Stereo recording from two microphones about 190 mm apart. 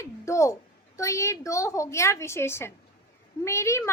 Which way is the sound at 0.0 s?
15° left (ahead or behind).